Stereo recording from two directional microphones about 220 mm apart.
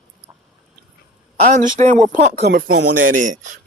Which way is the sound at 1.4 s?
35° right (ahead or behind).